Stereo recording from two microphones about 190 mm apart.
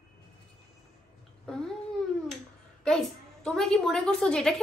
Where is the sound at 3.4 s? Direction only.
Centre (ahead or behind).